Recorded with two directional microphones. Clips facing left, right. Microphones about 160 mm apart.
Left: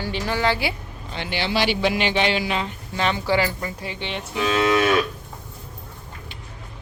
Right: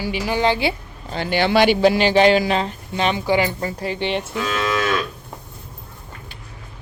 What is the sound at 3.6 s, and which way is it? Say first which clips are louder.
Speech: right 6 dB; 40° right (ahead or behind).